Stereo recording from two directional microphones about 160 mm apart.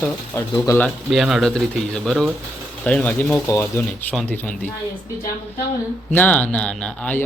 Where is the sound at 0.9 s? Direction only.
Centre (ahead or behind); by 3.7 s 20° left (ahead or behind).